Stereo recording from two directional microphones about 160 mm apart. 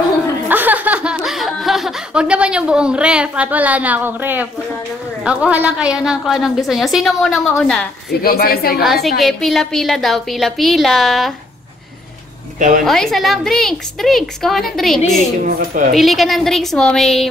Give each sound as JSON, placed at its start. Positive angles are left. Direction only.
{"t": 0.5, "sound": "chuckle", "side_deg": -10}
{"t": 5.2, "sound": "a woman's voice", "side_deg": -5}
{"t": 8.1, "sound": "a woman's voice", "side_deg": 70}
{"t": 8.8, "sound": "a woman's voice", "side_deg": 0}
{"t": 12.5, "sound": "speech", "side_deg": -55}
{"t": 12.8, "sound": "a woman's voice", "side_deg": 0}
{"t": 15.4, "sound": "speech", "side_deg": -55}
{"t": 15.9, "sound": "a woman's voice", "side_deg": 0}